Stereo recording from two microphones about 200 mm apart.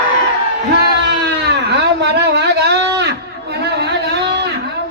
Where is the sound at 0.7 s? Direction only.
55° right (ahead or behind).